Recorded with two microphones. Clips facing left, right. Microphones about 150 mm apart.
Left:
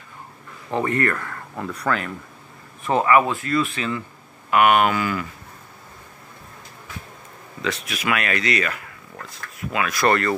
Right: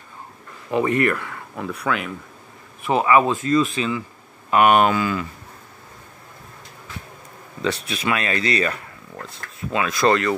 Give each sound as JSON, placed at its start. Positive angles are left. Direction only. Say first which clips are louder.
{"t": 0.7, "sound": "speech", "louder": "right 3 dB", "side_deg": -15}
{"t": 1.1, "sound": "speech", "louder": "right 1 dB", "side_deg": -5}
{"t": 2.9, "sound": "speech", "louder": "right 1 dB", "side_deg": -20}
{"t": 7.6, "sound": "speech", "louder": "right 2 dB", "side_deg": -30}